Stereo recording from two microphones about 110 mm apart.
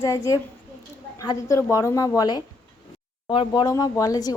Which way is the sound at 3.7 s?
30° left (ahead or behind).